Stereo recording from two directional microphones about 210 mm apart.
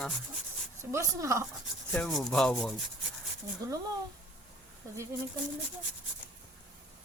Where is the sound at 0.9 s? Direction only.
15° right (ahead or behind).